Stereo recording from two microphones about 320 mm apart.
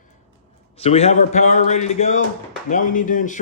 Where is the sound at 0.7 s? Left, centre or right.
Centre.